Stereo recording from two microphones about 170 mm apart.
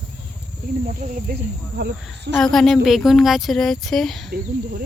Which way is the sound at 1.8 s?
75° right (ahead or behind).